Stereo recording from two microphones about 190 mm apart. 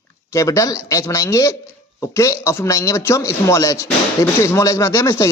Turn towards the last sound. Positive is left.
turn(degrees=15)  # may be behind; listen again after turning